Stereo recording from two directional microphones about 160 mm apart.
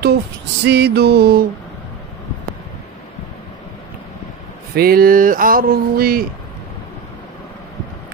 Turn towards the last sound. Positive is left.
turn(degrees=-70)  # may be behind; listen again after turning